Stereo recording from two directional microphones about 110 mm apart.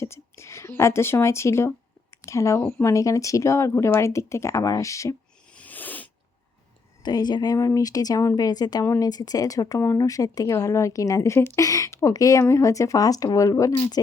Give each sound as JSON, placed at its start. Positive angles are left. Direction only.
{"t": 0.0, "sound": "speech", "side_deg": 25}
{"t": 5.5, "sound": "sneeze", "side_deg": 15}
{"t": 7.0, "sound": "speech", "side_deg": 40}
{"t": 8.8, "sound": "speech", "side_deg": 25}
{"t": 9.0, "sound": "speech", "side_deg": 35}